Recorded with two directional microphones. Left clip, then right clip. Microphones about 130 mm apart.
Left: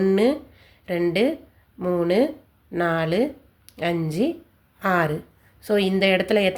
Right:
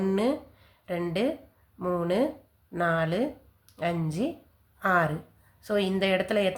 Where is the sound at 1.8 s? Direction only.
25° left (ahead or behind).